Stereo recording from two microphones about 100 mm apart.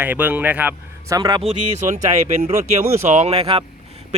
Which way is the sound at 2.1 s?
90° right.